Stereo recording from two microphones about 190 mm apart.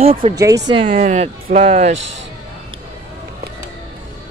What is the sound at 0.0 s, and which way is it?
Speech, 30° right (ahead or behind).